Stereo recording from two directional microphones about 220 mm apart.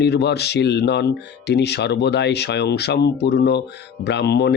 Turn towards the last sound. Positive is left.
turn(degrees=50)  # may be behind; listen again after turning